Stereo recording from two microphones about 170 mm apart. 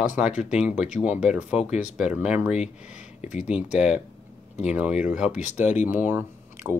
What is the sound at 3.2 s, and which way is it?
Speech, 40° left (ahead or behind).